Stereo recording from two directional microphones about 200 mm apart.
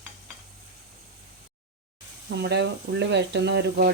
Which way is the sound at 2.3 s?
60° right (ahead or behind).